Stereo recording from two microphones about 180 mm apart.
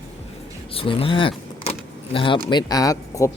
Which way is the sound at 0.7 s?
30° left (ahead or behind).